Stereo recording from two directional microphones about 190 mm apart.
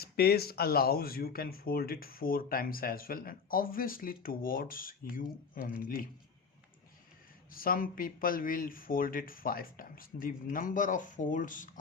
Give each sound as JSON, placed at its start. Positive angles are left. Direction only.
{"t": 0.0, "sound": "speech", "side_deg": 55}
{"t": 7.5, "sound": "speech", "side_deg": 50}